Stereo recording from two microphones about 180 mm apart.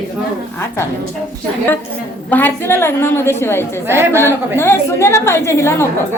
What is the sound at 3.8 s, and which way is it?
Speech, 15° right (ahead or behind).